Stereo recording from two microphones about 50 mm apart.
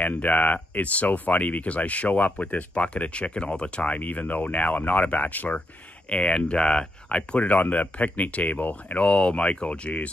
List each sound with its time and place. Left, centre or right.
0.0 s speech: left
6.0 s speech: left
7.3 s speech: left
9.0 s speech: left